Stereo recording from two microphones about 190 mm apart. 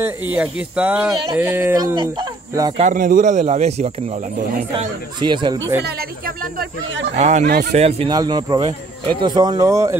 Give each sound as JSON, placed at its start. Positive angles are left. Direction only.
{"t": 0.0, "sound": "speech", "side_deg": -10}
{"t": 2.8, "sound": "speech", "side_deg": -45}
{"t": 4.7, "sound": "speech", "side_deg": -25}
{"t": 5.9, "sound": "speech", "side_deg": -50}
{"t": 7.2, "sound": "speech", "side_deg": -35}
{"t": 8.1, "sound": "speech", "side_deg": -20}